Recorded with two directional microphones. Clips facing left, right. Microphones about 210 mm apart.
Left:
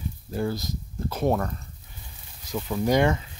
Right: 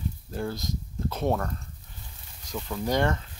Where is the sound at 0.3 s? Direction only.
5° left (ahead or behind).